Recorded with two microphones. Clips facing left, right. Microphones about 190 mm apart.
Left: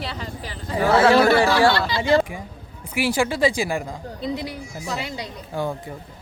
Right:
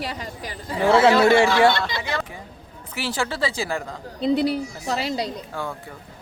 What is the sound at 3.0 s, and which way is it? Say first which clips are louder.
Speech: left 5 dB; 10° left (ahead or behind).